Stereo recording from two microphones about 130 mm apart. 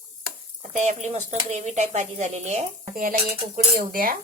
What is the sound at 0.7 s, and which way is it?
Speech, 65° right (ahead or behind).